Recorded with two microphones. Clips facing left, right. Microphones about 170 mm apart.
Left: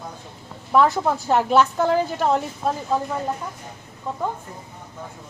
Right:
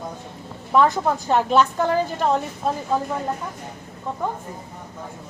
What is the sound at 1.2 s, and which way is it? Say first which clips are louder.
A woman's voice: left 1 dB; 5° left (ahead or behind).